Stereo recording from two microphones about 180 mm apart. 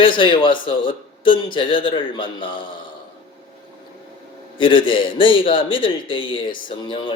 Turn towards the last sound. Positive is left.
turn(degrees=25)  # may be behind; listen again after turning